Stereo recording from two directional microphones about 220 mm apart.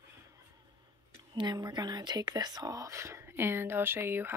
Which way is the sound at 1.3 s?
20° right (ahead or behind).